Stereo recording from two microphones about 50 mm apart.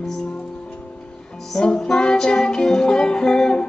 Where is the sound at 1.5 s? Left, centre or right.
Centre.